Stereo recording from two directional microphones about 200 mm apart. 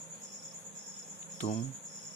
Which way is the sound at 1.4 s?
40° left (ahead or behind).